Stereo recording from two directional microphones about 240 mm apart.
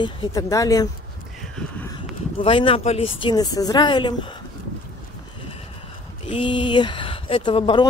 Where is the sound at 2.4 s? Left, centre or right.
Left.